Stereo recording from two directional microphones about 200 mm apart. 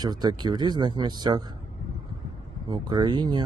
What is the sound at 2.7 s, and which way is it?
Speech, 20° right (ahead or behind).